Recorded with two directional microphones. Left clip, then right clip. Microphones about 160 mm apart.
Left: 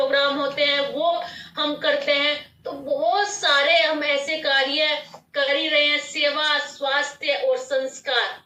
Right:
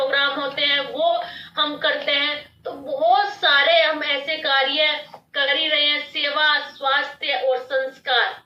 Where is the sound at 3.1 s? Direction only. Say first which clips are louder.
Right 4 dB; 20° right (ahead or behind).